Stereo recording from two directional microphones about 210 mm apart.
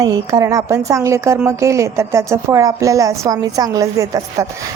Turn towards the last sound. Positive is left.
turn(degrees=-15)  # may be behind; listen again after turning